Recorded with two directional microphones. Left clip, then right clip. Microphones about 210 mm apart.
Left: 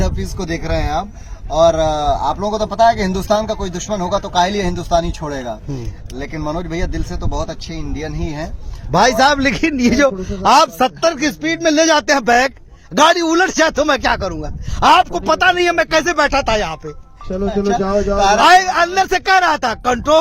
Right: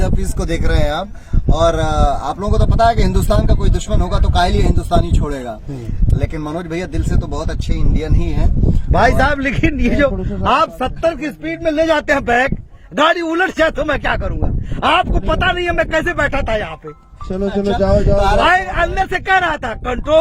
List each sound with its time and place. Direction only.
0.0 s speech: centre (ahead or behind)
8.9 s a man's voice: 20° left (ahead or behind); by 12.0 s 45° left (ahead or behind)
12.0 s a man's voice: 30° left (ahead or behind)
17.3 s speech: 40° right (ahead or behind)
18.3 s speech: 30° left (ahead or behind)